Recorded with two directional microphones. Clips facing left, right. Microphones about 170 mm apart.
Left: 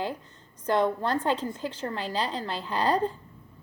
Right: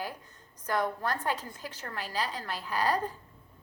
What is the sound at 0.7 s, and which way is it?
A woman's voice, 25° left (ahead or behind).